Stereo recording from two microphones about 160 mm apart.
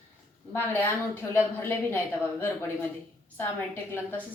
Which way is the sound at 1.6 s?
10° left (ahead or behind).